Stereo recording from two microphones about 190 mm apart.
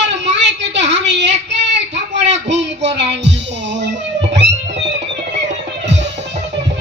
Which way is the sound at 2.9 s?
65° right (ahead or behind).